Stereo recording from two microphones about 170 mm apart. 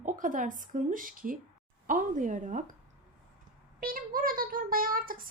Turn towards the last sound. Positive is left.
turn(degrees=-55)  # may be behind; listen again after turning